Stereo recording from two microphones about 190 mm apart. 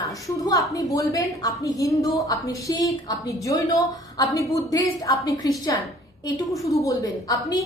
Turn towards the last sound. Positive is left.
turn(degrees=20)  # may be behind; listen again after turning